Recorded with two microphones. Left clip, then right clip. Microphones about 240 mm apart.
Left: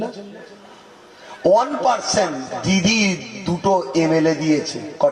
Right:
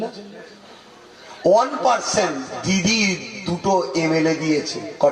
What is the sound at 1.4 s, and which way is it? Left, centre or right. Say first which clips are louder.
A man's voice: left 1 dB; left.